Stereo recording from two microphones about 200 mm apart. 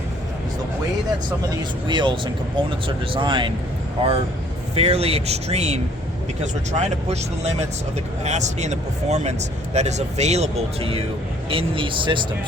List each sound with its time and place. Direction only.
1.9 s speech: 25° right (ahead or behind)
4.7 s speech: 30° right (ahead or behind)